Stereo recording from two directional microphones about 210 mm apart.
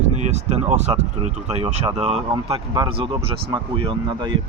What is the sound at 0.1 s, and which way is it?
Speech, 35° right (ahead or behind).